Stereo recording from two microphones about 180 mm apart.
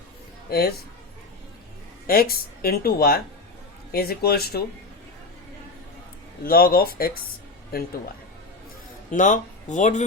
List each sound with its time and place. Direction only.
0.5 s speech: 60° left (ahead or behind)
2.0 s speech: 55° left (ahead or behind)
6.4 s speech: 55° left (ahead or behind)
9.1 s speech: 45° left (ahead or behind)